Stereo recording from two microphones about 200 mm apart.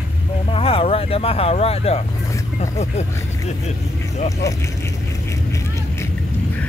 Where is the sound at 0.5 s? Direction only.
30° left (ahead or behind).